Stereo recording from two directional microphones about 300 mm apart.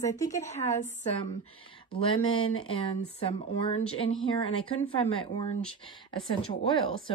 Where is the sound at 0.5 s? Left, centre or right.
Left.